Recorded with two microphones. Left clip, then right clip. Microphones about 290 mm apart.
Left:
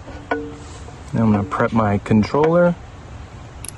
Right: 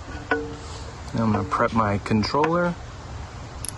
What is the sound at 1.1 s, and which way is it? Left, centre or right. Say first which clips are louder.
Speech: left 3 dB; left.